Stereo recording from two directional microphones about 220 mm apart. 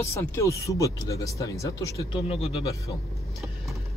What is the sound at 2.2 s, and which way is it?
Speech, 30° left (ahead or behind).